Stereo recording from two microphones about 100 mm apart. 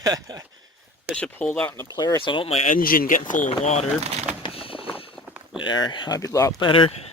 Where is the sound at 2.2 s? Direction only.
60° left (ahead or behind).